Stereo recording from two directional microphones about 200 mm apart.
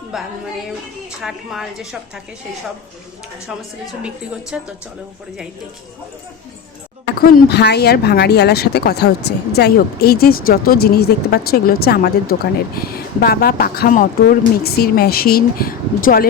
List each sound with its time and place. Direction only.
1.2 s a woman's voice: centre (ahead or behind)
4.5 s a woman's voice: 5° right (ahead or behind)
7.2 s speech: 50° left (ahead or behind)